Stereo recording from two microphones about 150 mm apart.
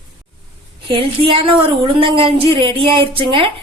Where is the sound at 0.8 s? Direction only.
35° right (ahead or behind).